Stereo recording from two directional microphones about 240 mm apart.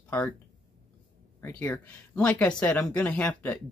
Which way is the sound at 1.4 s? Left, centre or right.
Centre.